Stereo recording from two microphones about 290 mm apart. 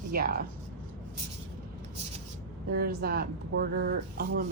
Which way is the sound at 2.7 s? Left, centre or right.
Right.